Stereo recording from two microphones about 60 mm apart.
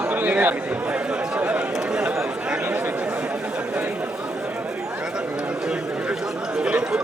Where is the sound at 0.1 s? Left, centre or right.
Right.